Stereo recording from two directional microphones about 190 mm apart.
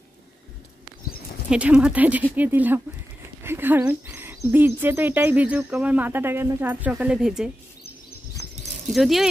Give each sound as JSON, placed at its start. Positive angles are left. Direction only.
{"t": 1.5, "sound": "speech", "side_deg": -5}
{"t": 8.4, "sound": "cricket", "side_deg": 15}
{"t": 8.9, "sound": "speech", "side_deg": 0}